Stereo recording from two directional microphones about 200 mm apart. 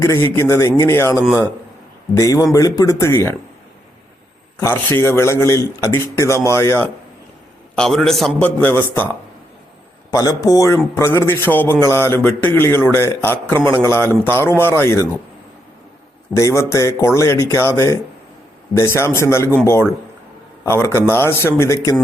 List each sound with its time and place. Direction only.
0.0 s a man's voice: 15° left (ahead or behind)
4.6 s a man's voice: 10° left (ahead or behind)
10.1 s a man's voice: 15° left (ahead or behind)
16.3 s a man's voice: 15° left (ahead or behind)
20.7 s a man's voice: 10° left (ahead or behind)